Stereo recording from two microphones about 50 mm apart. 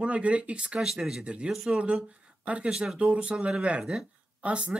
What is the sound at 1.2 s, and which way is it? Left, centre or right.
Speech, right.